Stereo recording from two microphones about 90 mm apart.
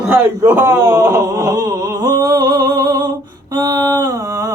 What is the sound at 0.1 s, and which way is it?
A man's voice, 25° right (ahead or behind).